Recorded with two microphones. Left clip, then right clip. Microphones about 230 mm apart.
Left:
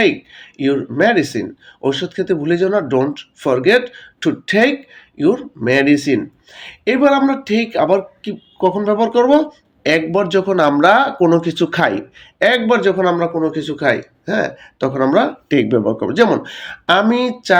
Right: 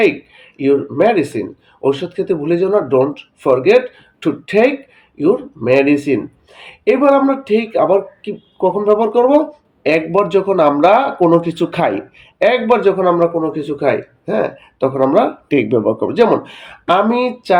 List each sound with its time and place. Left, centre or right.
0.0 s speech: left